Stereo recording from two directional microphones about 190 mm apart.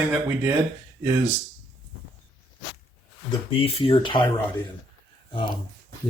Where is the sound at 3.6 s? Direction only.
30° left (ahead or behind).